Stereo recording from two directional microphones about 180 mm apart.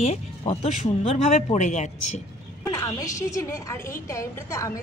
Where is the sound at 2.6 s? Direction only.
20° left (ahead or behind).